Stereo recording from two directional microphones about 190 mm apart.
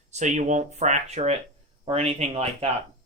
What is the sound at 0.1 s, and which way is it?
Speech, 40° right (ahead or behind).